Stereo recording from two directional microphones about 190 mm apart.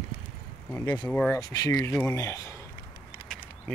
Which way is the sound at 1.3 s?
20° left (ahead or behind).